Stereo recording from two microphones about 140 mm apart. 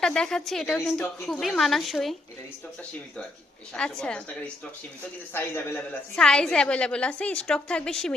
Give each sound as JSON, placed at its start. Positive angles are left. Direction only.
{"t": 0.0, "sound": "a woman's voice", "side_deg": 5}
{"t": 4.0, "sound": "a woman's voice", "side_deg": 10}
{"t": 6.1, "sound": "a woman's voice", "side_deg": 5}